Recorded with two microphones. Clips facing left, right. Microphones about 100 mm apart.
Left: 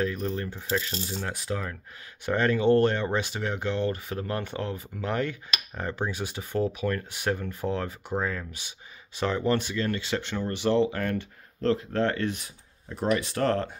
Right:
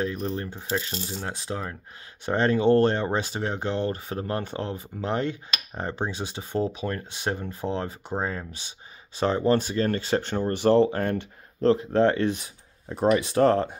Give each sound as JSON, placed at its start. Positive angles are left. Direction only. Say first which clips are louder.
{"t": 0.0, "sound": "speech", "louder": "even", "side_deg": -20}
{"t": 13.2, "sound": "speech", "louder": "right 6 dB", "side_deg": -20}